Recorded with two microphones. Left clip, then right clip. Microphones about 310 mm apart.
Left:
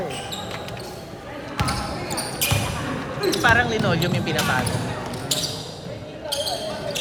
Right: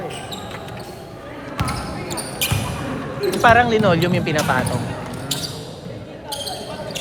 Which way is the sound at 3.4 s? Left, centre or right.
Centre.